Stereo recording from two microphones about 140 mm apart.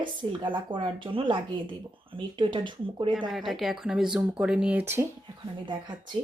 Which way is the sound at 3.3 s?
Centre (ahead or behind).